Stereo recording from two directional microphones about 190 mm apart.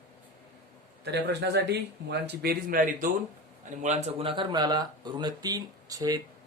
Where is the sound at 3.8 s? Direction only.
35° right (ahead or behind); by 6.2 s 20° right (ahead or behind).